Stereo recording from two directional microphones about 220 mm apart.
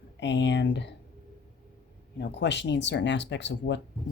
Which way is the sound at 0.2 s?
55° left (ahead or behind).